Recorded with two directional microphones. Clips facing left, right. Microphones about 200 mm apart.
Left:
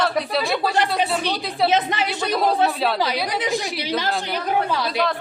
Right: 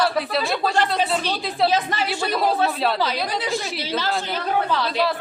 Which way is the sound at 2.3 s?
Centre (ahead or behind).